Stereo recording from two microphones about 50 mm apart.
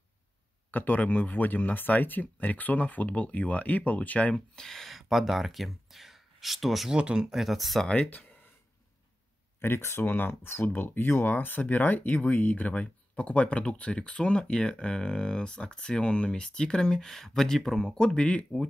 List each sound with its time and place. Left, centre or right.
0.7 s speech: left
4.6 s speech: centre
7.0 s speech: centre
7.3 s speech: centre
9.6 s speech: left; by 18.7 s centre